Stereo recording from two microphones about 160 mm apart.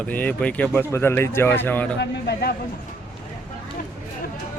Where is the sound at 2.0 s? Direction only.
90° left.